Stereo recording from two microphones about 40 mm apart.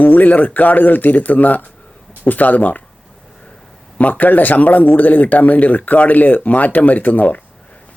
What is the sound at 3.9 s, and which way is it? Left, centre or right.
A man's voice, left.